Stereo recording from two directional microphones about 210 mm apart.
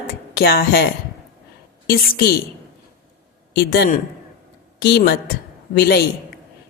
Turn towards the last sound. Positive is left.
turn(degrees=50)  # may be behind; listen again after turning